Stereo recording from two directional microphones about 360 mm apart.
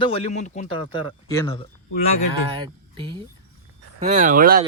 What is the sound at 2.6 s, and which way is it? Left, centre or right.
Speech, centre.